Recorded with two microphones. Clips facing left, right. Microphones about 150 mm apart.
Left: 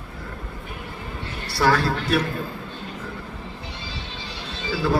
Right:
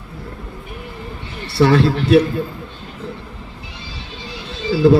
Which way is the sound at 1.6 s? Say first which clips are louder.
Right 6 dB; 25° right (ahead or behind).